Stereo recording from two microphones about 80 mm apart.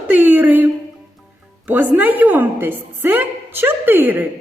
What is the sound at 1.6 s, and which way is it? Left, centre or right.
A woman's voice, right.